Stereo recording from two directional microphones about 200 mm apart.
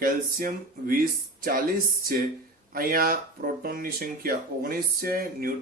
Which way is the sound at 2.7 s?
45° right (ahead or behind).